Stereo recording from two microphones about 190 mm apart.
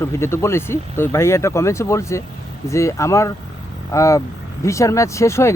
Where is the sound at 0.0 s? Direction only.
15° left (ahead or behind).